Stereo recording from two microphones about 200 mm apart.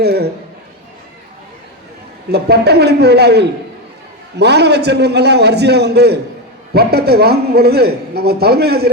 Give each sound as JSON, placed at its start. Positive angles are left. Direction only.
{"t": 0.0, "sound": "a man's voice", "side_deg": -55}
{"t": 2.3, "sound": "a man's voice", "side_deg": -55}